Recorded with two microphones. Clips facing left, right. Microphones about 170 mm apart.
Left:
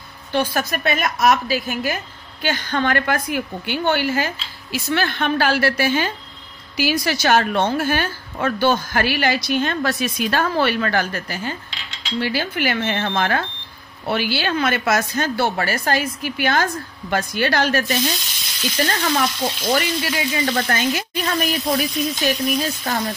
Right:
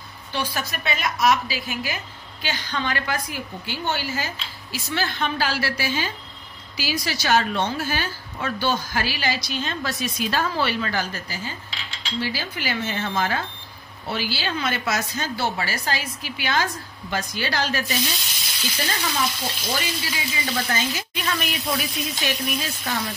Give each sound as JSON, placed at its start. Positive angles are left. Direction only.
{"t": 0.3, "sound": "a woman's voice", "side_deg": 50}
{"t": 21.4, "sound": "speech", "side_deg": 45}
{"t": 22.8, "sound": "a woman's voice", "side_deg": 55}